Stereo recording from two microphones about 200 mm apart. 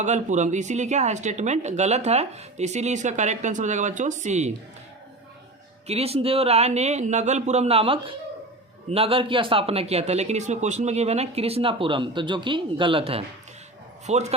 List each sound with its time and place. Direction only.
0.0 s speech: 35° right (ahead or behind)
5.9 s speech: 30° right (ahead or behind)